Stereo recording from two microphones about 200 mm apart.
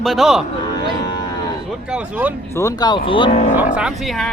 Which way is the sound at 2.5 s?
15° left (ahead or behind).